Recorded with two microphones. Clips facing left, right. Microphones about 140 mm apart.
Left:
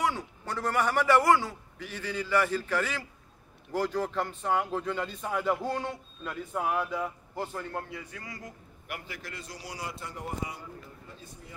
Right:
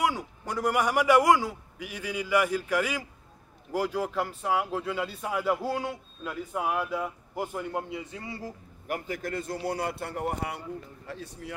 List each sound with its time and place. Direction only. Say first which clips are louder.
0.0 s speech: right 2 dB; 10° right (ahead or behind); by 10.6 s 65° right (ahead or behind)
11.1 s speech: right 9 dB; 75° right (ahead or behind)